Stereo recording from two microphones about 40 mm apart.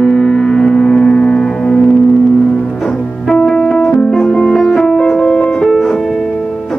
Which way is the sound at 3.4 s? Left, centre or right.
Centre.